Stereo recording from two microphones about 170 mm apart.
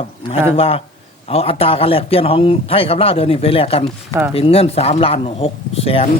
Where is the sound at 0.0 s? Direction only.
35° left (ahead or behind).